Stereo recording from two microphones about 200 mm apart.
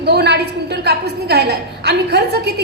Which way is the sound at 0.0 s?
55° right (ahead or behind).